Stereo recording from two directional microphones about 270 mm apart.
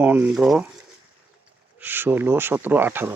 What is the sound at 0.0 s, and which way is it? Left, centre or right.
Speech, centre.